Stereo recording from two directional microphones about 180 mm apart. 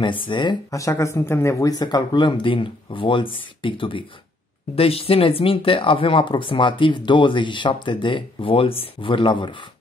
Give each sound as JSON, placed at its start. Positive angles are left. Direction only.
{"t": 0.3, "sound": "speech", "side_deg": 25}